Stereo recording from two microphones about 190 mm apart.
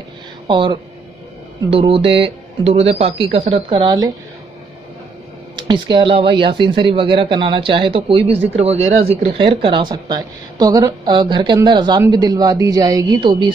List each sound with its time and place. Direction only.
0.5 s speech: 25° right (ahead or behind)
5.6 s speech: 25° right (ahead or behind)